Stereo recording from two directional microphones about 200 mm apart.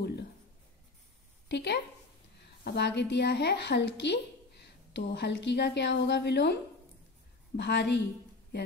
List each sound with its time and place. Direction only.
1.5 s a woman's voice: 60° left (ahead or behind)